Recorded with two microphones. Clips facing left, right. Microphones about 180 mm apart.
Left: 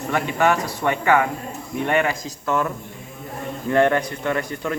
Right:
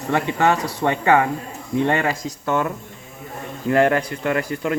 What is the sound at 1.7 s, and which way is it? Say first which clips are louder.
Speech: right 2 dB; 25° right (ahead or behind).